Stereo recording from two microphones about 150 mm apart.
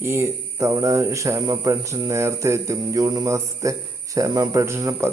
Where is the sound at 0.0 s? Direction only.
20° right (ahead or behind).